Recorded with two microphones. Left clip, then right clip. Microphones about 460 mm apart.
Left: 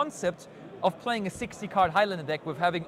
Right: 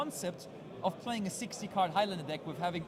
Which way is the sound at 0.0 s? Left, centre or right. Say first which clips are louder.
Left 9 dB; left.